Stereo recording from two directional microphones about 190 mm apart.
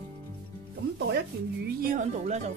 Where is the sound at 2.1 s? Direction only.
35° right (ahead or behind).